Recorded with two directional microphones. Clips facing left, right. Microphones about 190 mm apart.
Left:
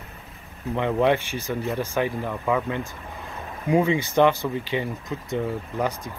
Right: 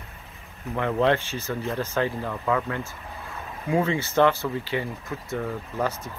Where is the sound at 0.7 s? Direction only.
15° left (ahead or behind).